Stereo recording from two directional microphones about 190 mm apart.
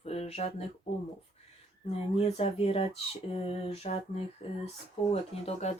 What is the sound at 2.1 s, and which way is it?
Speech, 30° left (ahead or behind).